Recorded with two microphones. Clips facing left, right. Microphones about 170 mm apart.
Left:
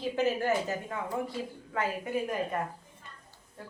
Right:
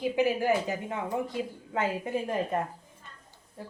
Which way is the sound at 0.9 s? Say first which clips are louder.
Right 2 dB; 20° right (ahead or behind).